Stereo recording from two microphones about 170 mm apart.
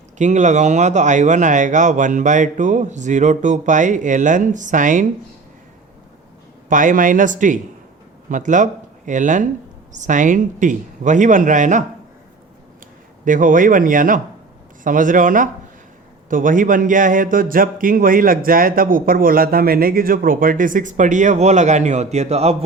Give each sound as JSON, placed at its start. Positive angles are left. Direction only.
{"t": 0.2, "sound": "speech", "side_deg": -45}
{"t": 6.7, "sound": "speech", "side_deg": -50}
{"t": 13.2, "sound": "speech", "side_deg": -50}